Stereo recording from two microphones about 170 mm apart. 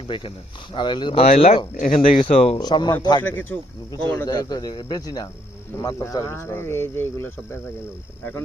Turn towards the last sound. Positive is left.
turn(degrees=15)  # may be behind; listen again after turning